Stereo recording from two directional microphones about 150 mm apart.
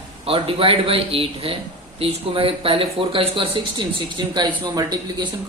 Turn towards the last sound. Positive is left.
turn(degrees=-30)  # may be behind; listen again after turning